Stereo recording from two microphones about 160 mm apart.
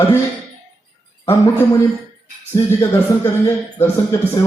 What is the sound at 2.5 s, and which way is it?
A man's voice, 15° left (ahead or behind).